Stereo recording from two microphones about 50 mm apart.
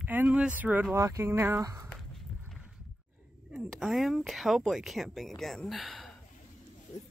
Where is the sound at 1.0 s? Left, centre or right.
Right.